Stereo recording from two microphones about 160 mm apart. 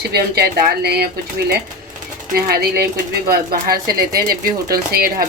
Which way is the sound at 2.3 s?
75° right (ahead or behind).